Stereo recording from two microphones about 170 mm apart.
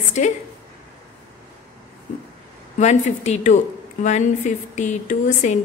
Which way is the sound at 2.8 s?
40° left (ahead or behind).